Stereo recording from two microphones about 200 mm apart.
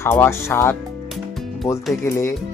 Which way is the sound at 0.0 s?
10° left (ahead or behind).